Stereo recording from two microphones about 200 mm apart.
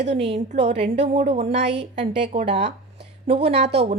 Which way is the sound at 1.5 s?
60° right (ahead or behind).